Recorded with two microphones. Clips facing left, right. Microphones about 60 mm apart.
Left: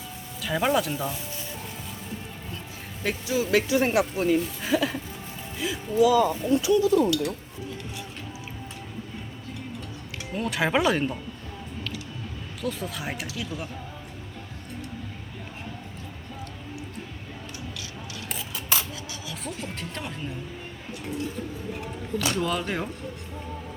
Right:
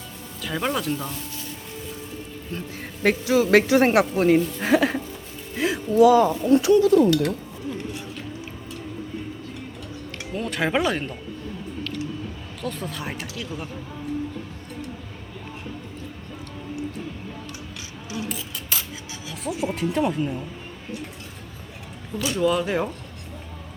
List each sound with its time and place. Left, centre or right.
0.4 s speech: centre
3.0 s speech: right
10.3 s speech: centre
12.6 s speech: centre
19.3 s speech: centre
22.4 s speech: centre